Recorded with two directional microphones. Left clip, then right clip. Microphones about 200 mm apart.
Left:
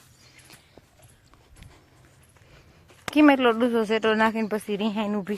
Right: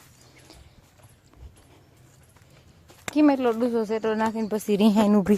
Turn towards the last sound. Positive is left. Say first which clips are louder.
# right 6 dB
turn(degrees=-40)  # may be behind; listen again after turning